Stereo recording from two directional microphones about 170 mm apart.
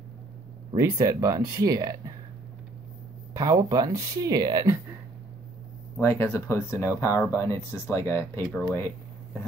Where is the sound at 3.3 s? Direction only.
20° right (ahead or behind).